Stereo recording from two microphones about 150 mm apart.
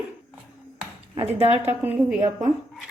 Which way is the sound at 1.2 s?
45° right (ahead or behind).